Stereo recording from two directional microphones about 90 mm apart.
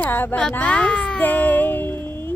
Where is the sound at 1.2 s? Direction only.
20° left (ahead or behind).